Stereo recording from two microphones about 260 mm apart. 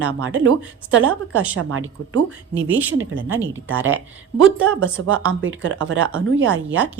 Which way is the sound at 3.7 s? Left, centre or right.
Right.